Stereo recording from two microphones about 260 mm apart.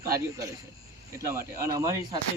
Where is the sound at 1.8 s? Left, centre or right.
Centre.